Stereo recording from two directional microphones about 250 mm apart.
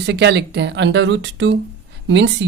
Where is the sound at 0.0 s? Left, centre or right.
Right.